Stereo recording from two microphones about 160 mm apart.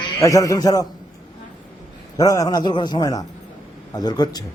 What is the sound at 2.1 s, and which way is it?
A man's voice, 25° left (ahead or behind).